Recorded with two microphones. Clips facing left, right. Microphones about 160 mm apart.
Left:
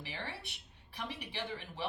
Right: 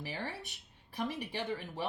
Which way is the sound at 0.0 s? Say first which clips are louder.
Right 4 dB; 45° right (ahead or behind).